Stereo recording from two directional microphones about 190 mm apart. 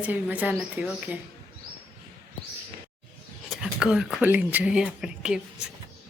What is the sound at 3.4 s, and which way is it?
Speech, 5° right (ahead or behind).